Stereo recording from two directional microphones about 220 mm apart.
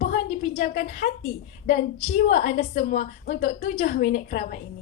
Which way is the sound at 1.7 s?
50° left (ahead or behind).